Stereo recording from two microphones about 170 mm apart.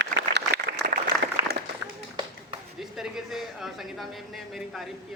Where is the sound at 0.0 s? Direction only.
80° right.